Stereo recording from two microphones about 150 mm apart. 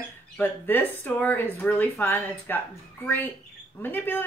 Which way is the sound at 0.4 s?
15° left (ahead or behind).